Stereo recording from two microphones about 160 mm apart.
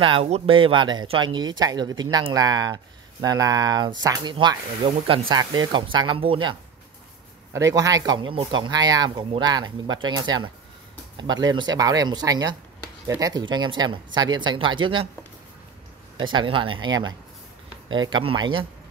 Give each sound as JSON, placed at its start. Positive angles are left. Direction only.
{"t": 0.0, "sound": "speech", "side_deg": -35}
{"t": 7.5, "sound": "speech", "side_deg": -20}
{"t": 16.2, "sound": "speech", "side_deg": -30}